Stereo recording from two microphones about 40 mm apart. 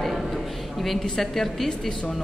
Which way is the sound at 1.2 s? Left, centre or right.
Centre.